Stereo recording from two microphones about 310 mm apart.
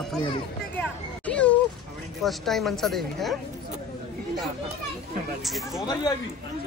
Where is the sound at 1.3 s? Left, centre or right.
Centre.